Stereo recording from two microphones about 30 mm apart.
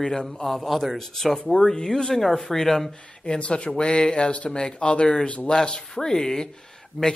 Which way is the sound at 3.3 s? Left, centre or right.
Left.